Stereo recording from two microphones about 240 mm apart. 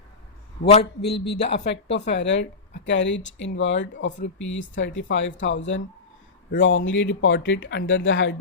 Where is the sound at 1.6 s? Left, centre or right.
Left.